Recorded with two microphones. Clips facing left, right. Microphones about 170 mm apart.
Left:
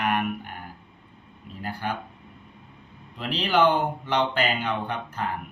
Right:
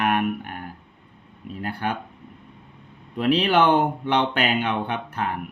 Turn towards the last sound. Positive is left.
turn(degrees=-60)  # may be behind; listen again after turning